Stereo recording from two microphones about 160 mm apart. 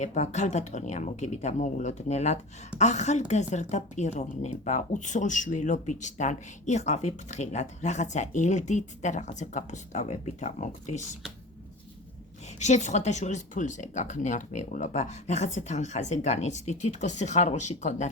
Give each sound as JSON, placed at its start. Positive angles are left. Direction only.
{"t": 0.0, "sound": "speech", "side_deg": 45}
{"t": 12.5, "sound": "speech", "side_deg": 45}